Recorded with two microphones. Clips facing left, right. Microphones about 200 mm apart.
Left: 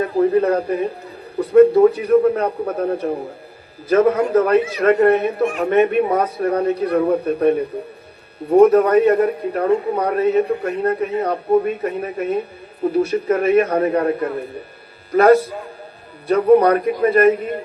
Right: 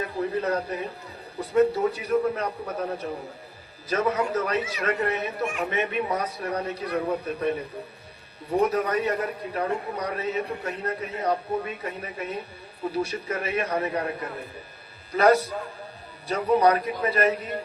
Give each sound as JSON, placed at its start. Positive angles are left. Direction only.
{"t": 0.0, "sound": "a man's voice", "side_deg": 55}